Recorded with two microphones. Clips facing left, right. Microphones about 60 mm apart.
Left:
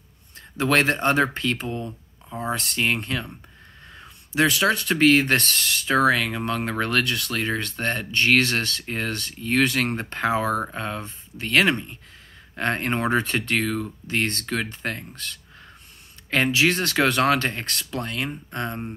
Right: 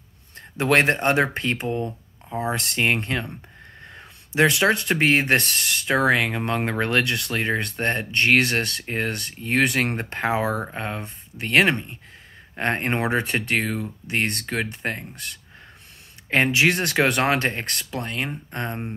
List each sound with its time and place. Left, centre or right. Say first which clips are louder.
0.6 s speech: right 1 dB; right
3.8 s a sound: right 1 dB; right
4.4 s speech: right 2 dB; right
10.3 s speech: even; centre
10.7 s speech: even; right